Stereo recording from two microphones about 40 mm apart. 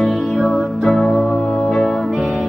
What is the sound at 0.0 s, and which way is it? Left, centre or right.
Music, centre.